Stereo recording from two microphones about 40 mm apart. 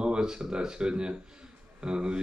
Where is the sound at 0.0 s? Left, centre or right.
Centre.